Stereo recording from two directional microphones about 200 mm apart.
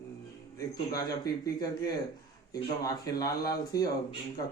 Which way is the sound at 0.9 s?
20° left (ahead or behind).